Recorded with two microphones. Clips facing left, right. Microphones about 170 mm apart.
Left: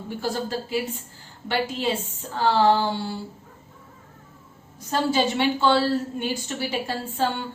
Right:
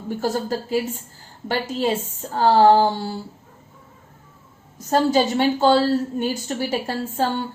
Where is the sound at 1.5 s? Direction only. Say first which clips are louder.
Right 3 dB; 45° right (ahead or behind).